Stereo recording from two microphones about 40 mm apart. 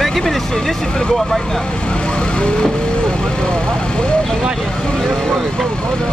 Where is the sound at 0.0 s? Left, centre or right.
Centre.